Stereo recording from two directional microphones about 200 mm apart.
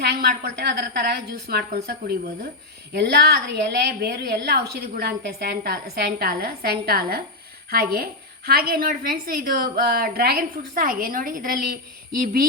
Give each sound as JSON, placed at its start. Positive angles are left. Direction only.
{"t": 0.0, "sound": "a woman's voice", "side_deg": -50}